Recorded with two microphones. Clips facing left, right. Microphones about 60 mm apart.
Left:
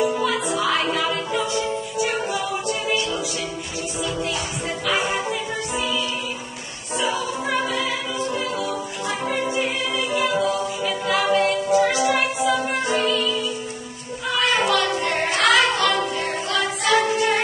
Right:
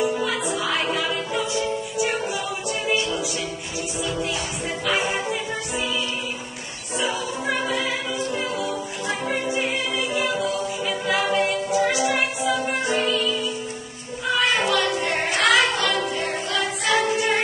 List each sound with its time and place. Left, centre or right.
0.0 s music: centre
5.0 s music: centre
7.4 s music: centre
9.3 s music: centre
9.9 s music: centre
10.4 s a capella: centre
14.7 s music: centre